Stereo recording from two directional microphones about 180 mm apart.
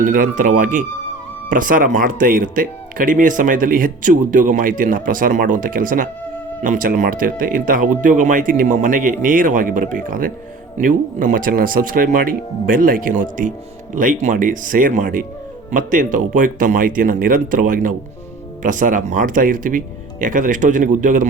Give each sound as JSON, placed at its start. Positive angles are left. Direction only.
{"t": 0.0, "sound": "speech", "side_deg": -50}